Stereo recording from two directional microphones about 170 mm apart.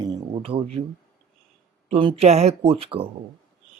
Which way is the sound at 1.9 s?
35° right (ahead or behind).